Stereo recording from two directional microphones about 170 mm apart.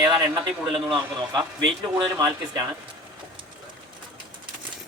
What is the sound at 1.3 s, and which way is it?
Speech, 25° right (ahead or behind).